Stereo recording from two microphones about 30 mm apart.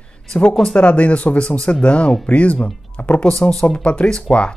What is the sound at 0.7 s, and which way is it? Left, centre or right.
Speech, left.